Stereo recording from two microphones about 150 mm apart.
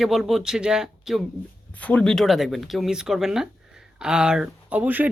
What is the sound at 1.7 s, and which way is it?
Speech, 10° left (ahead or behind).